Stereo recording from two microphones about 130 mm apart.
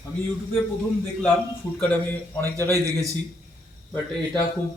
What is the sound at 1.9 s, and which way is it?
Speech, 15° left (ahead or behind).